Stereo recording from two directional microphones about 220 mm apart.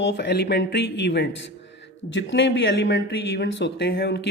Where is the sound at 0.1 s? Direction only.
50° left (ahead or behind).